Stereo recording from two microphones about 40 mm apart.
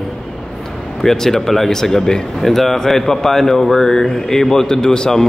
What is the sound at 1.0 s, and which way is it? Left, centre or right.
Speech, centre.